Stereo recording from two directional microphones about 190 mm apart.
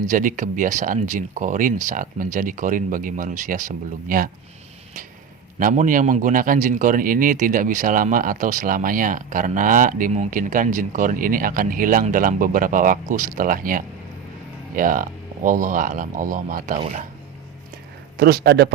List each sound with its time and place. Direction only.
0.1 s a man's voice: 45° right (ahead or behind)
5.5 s a man's voice: 45° right (ahead or behind)
18.2 s a man's voice: 55° right (ahead or behind)